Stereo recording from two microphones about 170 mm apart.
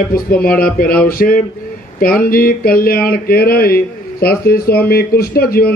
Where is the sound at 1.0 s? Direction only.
60° left (ahead or behind).